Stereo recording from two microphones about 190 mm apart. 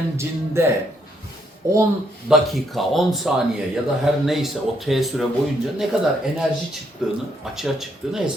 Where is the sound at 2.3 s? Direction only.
Centre (ahead or behind).